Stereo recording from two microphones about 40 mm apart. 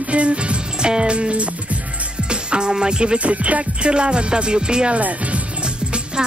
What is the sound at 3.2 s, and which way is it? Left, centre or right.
Music, right.